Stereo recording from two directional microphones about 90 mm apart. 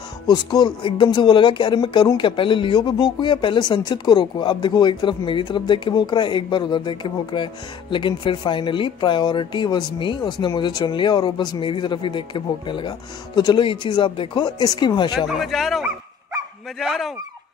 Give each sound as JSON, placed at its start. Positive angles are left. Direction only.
{"t": 0.3, "sound": "speech", "side_deg": 50}
{"t": 13.7, "sound": "a man's voice", "side_deg": 65}
{"t": 14.4, "sound": "speech", "side_deg": 50}
{"t": 15.1, "sound": "speech", "side_deg": -5}